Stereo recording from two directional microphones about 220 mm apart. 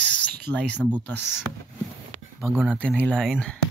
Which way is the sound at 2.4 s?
5° right (ahead or behind).